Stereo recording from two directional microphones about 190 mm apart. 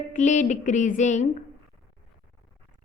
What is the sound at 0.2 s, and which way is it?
A woman's voice, 40° left (ahead or behind).